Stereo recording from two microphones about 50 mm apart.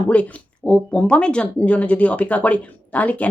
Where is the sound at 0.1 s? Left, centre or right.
Left.